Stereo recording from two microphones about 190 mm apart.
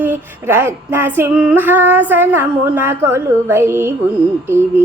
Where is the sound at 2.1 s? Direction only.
10° right (ahead or behind).